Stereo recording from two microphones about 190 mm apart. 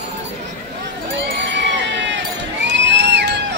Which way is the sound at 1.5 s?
70° right (ahead or behind).